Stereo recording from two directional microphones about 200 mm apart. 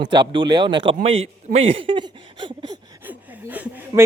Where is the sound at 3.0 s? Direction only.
10° right (ahead or behind).